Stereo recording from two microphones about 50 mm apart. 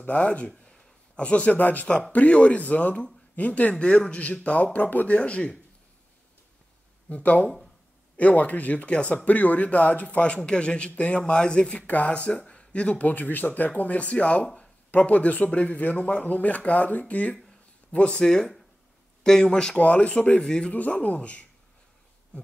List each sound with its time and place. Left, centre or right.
0.0 s speech: left
0.5 s a sound: centre; by 1.9 s left
2.1 s speech: left
3.7 s speech: centre; by 5.1 s left
5.1 s speech: left
7.1 s speech: left
18.2 s speech: centre
19.8 s speech: left
20.3 s speech: centre
20.7 s speech: left